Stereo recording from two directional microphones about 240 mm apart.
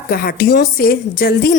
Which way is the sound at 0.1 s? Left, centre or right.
Left.